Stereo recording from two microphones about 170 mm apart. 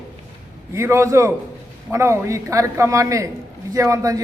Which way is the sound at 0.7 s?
15° right (ahead or behind).